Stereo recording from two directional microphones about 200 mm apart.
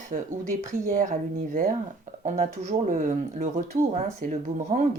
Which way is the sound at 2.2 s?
35° right (ahead or behind).